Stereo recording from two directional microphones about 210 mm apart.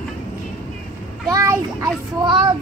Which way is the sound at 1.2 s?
15° right (ahead or behind).